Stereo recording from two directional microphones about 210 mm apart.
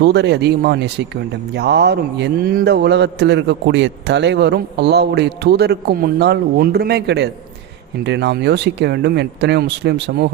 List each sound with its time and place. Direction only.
0.0 s speech: 55° right (ahead or behind)